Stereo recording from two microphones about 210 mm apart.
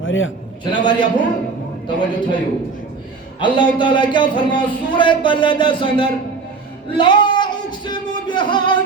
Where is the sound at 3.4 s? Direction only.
25° left (ahead or behind).